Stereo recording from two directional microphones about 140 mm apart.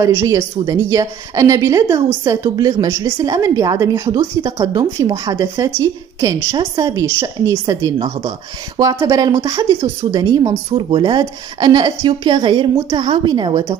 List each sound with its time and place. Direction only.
0.0 s a woman's voice: 25° right (ahead or behind)
10.7 s a woman's voice: 35° right (ahead or behind)